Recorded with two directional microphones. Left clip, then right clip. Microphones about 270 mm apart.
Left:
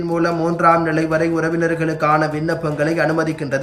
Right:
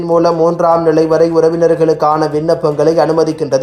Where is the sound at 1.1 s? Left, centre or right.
Centre.